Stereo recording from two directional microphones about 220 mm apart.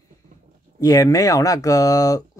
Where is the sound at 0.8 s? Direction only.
15° left (ahead or behind).